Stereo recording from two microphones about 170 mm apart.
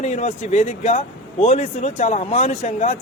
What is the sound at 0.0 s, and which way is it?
A man's voice, 40° left (ahead or behind).